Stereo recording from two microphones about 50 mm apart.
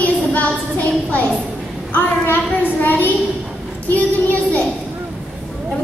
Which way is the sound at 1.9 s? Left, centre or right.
Left.